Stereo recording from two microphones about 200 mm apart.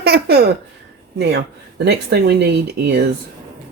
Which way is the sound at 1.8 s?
55° right (ahead or behind).